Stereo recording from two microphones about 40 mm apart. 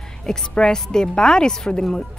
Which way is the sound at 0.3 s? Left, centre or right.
Centre.